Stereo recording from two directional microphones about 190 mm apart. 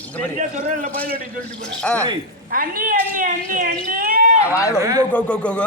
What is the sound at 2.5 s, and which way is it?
Speech, 45° right (ahead or behind).